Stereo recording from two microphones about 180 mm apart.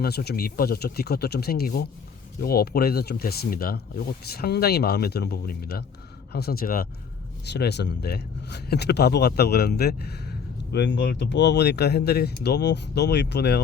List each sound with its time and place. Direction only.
0.0 s speech: 60° left (ahead or behind)
7.4 s speech: 70° left (ahead or behind)